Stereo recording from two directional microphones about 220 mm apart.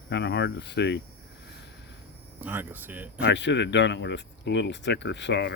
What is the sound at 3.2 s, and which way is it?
Speech, 55° left (ahead or behind).